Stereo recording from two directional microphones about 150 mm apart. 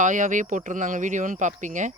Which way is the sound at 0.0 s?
55° right (ahead or behind).